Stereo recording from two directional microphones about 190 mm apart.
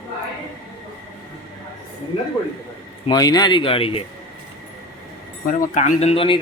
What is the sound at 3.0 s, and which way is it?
Speech, 20° left (ahead or behind).